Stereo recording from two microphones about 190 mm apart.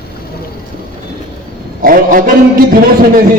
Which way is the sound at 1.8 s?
45° right (ahead or behind).